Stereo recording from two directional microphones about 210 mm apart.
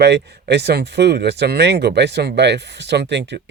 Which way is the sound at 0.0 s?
55° right (ahead or behind).